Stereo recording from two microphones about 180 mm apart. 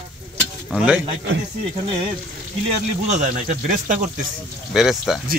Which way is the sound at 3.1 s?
40° right (ahead or behind).